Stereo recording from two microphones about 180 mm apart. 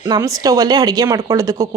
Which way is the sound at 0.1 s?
20° right (ahead or behind).